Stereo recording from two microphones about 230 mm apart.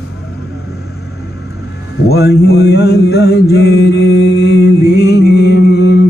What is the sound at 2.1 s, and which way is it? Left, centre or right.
Mantra, left.